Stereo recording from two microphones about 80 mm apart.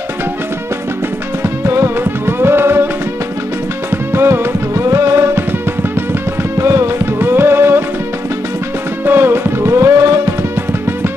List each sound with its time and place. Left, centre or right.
1.4 s music: right
4.1 s music: right
6.5 s music: right
9.0 s music: right